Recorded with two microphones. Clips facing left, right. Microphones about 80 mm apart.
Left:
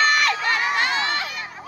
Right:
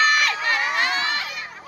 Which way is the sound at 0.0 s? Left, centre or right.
Centre.